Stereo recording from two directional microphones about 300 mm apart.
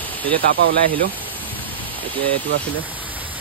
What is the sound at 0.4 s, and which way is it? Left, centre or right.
Speech, right.